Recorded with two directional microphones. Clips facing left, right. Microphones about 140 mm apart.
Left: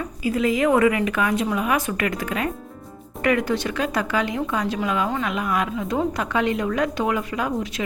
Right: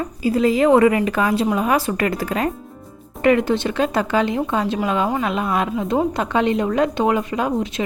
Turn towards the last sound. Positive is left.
turn(degrees=-25)  # may be behind; listen again after turning